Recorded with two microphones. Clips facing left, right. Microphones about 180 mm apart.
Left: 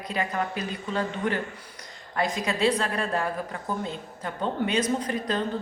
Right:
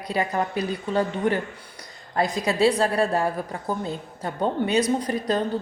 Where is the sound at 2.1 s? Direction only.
35° right (ahead or behind).